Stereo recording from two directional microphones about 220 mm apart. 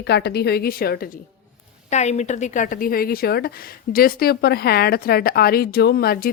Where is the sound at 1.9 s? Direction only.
30° left (ahead or behind).